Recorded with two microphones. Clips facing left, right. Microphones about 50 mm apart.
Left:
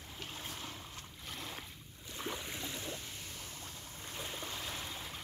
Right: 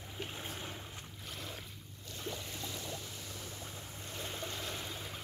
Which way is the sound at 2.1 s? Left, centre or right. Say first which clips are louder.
Left 1 dB; centre.